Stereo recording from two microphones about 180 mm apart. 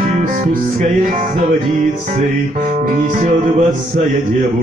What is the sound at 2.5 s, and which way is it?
Speech, 50° right (ahead or behind).